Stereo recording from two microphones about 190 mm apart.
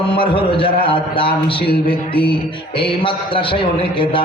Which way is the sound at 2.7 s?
25° left (ahead or behind).